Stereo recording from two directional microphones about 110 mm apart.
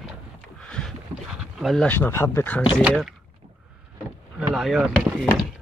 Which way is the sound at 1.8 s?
20° left (ahead or behind).